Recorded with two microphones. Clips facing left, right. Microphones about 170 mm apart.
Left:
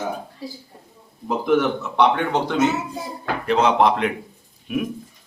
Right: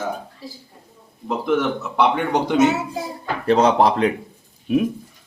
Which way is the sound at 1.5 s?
5° right (ahead or behind).